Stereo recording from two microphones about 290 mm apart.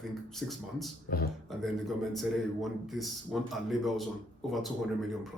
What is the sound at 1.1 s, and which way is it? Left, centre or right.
Speech, left.